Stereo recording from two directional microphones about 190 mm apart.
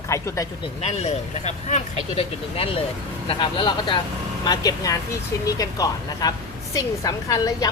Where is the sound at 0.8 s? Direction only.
35° left (ahead or behind).